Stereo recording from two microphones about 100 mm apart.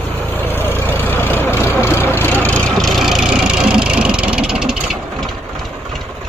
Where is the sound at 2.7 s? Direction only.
Centre (ahead or behind).